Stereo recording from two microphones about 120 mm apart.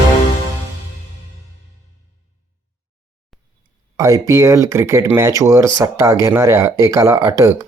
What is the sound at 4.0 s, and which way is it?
Speech, 25° right (ahead or behind).